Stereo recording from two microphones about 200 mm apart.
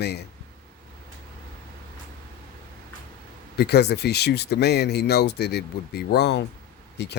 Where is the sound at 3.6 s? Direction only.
55° left (ahead or behind).